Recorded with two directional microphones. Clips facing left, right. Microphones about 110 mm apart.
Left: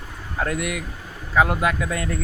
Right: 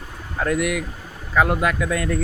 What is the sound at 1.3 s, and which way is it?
Speech, 15° left (ahead or behind).